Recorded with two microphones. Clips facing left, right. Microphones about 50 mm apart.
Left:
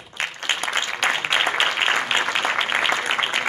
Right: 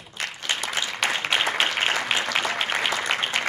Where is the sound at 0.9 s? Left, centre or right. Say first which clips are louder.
Left 3 dB; left.